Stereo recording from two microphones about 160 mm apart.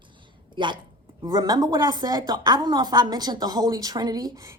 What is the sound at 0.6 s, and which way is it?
A woman's voice, 30° right (ahead or behind).